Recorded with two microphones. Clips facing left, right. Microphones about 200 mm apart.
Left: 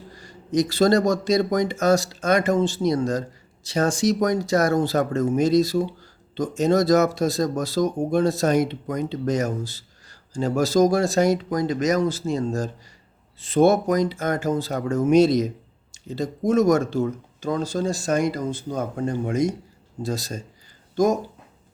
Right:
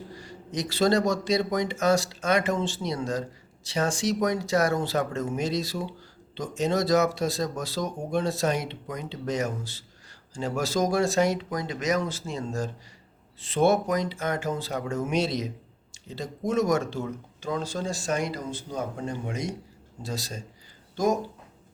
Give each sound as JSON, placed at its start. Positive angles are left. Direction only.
{"t": 0.2, "sound": "speech", "side_deg": 45}